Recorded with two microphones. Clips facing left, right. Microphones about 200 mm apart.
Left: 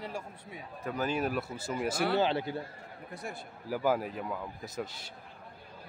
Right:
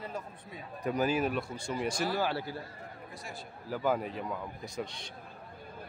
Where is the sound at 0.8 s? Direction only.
15° right (ahead or behind).